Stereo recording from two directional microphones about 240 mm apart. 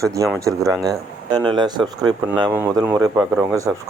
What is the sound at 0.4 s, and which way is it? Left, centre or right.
Speech, centre.